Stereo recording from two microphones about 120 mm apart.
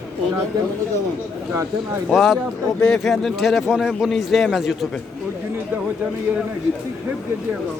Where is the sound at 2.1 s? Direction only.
Centre (ahead or behind).